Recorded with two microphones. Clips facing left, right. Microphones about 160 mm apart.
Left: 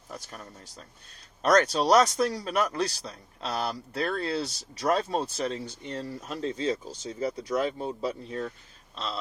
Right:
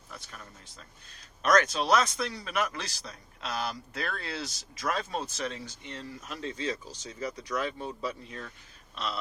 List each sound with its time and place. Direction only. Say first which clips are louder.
0.1 s speech: left 5 dB; 40° left (ahead or behind)